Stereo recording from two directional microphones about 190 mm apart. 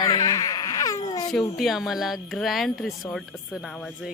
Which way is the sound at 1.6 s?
Centre (ahead or behind).